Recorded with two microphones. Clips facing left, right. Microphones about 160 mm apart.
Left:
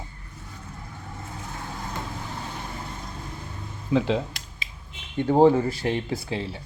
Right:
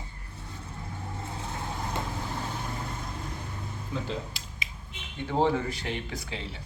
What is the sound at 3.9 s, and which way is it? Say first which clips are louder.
Speech: left 11 dB; 90° left.